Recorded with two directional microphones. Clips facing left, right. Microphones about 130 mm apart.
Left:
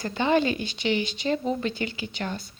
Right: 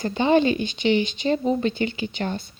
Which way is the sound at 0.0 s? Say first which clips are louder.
Right 4 dB; 20° right (ahead or behind).